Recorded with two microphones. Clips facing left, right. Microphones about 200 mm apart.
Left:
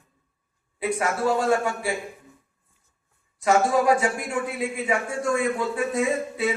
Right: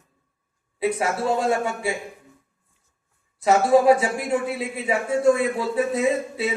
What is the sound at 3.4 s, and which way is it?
Speech, 25° right (ahead or behind).